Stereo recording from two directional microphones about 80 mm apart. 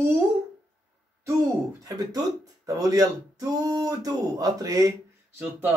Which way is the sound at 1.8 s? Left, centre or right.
Right.